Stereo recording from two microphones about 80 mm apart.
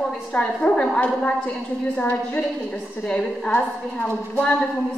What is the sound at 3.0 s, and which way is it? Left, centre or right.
A woman's voice, centre.